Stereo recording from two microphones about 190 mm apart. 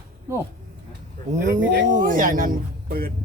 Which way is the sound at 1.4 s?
40° right (ahead or behind).